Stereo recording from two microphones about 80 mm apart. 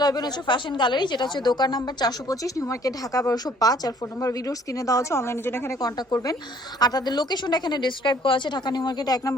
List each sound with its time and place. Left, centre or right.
0.0 s a woman's voice: left
5.8 s a woman's voice: left